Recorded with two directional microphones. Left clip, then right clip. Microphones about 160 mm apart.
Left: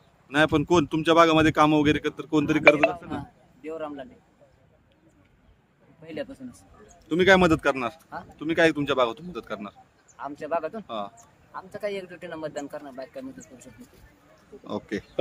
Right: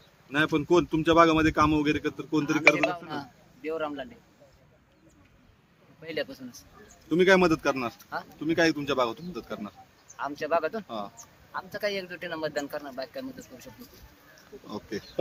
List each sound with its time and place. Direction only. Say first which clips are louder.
0.3 s speech: left 3 dB; 70° left (ahead or behind)
2.9 s a man's voice: even; 10° left (ahead or behind)
6.0 s speech: right 2 dB; 10° left (ahead or behind)
7.1 s a man's voice: left 2 dB; 65° left (ahead or behind); by 9.7 s 80° left
10.2 s speech: right 2 dB; 10° left (ahead or behind)
10.8 s a man's voice: left 3 dB; 80° left
11.5 s speech: right 1 dB; 15° left (ahead or behind)
14.7 s speech: left 5 dB; 90° left